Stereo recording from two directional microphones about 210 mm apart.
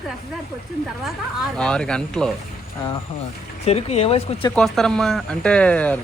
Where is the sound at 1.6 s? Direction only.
5° left (ahead or behind).